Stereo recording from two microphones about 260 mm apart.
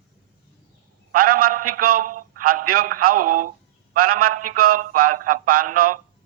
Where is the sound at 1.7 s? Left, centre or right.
Right.